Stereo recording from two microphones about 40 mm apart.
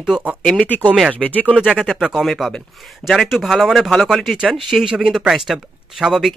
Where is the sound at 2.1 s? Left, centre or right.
Centre.